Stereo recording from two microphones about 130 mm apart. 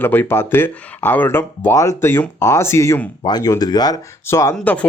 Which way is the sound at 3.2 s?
35° left (ahead or behind).